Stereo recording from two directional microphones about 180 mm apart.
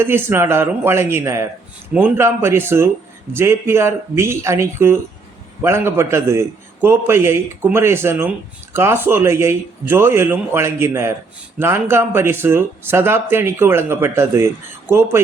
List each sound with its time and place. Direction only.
0.0 s speech: 15° right (ahead or behind)